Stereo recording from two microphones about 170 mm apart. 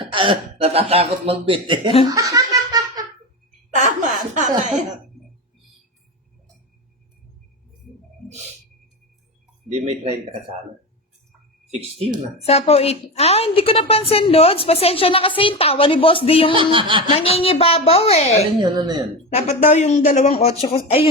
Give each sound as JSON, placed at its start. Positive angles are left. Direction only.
{"t": 0.0, "sound": "speech", "side_deg": -30}
{"t": 2.0, "sound": "giggle", "side_deg": -20}
{"t": 3.8, "sound": "snicker", "side_deg": -50}
{"t": 9.7, "sound": "speech", "side_deg": -35}
{"t": 11.7, "sound": "speech", "side_deg": -35}
{"t": 12.5, "sound": "a woman's voice", "side_deg": 35}
{"t": 16.5, "sound": "speech", "side_deg": -30}
{"t": 17.1, "sound": "a woman's voice", "side_deg": 35}
{"t": 18.6, "sound": "speech", "side_deg": -25}
{"t": 19.3, "sound": "a woman's voice", "side_deg": 40}